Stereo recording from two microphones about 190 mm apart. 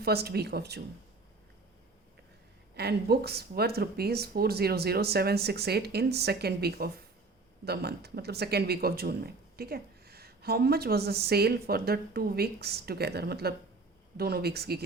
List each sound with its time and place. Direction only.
0.0 s speech: 55° right (ahead or behind)
2.7 s speech: 55° right (ahead or behind)